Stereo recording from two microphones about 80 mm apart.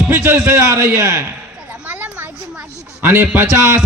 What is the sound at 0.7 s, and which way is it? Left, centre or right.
Speech, right.